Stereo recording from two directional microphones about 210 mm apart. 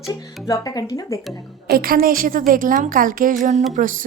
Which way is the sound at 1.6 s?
45° right (ahead or behind).